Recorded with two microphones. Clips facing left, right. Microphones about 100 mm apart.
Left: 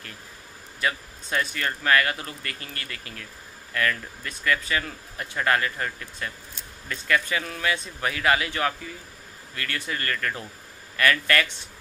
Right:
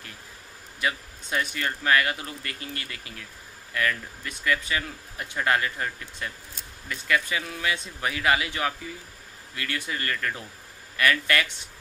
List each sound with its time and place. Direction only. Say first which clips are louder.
0.7 s a man's voice: left 1 dB; 20° right (ahead or behind)